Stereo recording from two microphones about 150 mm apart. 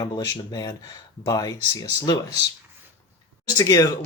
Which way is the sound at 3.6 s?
25° left (ahead or behind).